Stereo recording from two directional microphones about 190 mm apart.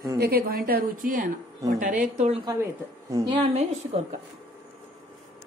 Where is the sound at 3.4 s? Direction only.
40° right (ahead or behind).